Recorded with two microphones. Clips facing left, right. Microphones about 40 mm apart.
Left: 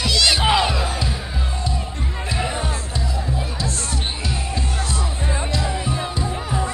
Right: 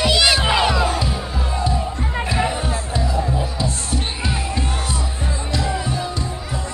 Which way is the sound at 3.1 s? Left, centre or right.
Centre.